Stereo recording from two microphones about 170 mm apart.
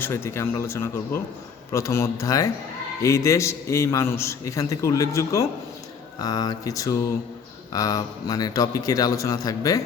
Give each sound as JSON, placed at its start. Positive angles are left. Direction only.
{"t": 0.0, "sound": "a man's voice", "side_deg": 15}